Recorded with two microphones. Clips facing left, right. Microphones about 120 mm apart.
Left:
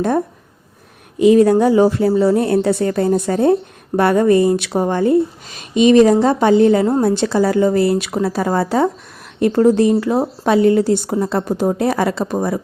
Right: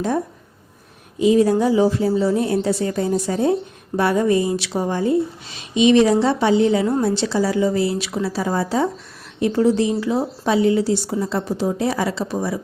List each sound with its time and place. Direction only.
1.2 s a woman's voice: 60° left (ahead or behind)